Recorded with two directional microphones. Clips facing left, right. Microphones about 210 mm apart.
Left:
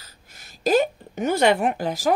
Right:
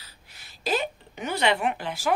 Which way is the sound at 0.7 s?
45° left (ahead or behind).